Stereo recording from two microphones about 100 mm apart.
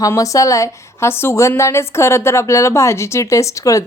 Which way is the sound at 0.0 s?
35° left (ahead or behind).